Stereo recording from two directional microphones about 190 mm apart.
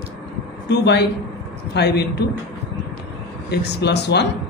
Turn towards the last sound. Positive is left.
turn(degrees=60)  # may be behind; listen again after turning